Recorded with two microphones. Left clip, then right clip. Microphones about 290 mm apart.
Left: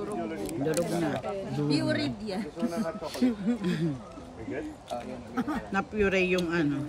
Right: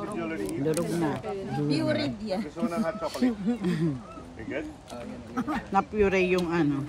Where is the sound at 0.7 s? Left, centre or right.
Centre.